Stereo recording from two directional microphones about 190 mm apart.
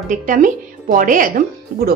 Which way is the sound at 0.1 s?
45° right (ahead or behind).